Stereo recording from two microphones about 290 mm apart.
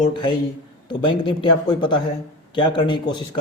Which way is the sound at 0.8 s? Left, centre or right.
Centre.